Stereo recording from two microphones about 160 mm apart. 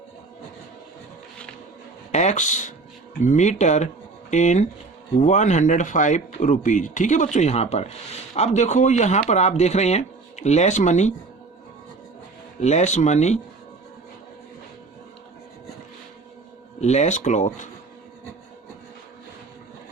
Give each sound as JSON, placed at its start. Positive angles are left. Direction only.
{"t": 2.1, "sound": "speech", "side_deg": 45}
{"t": 12.5, "sound": "speech", "side_deg": 45}
{"t": 16.8, "sound": "speech", "side_deg": 45}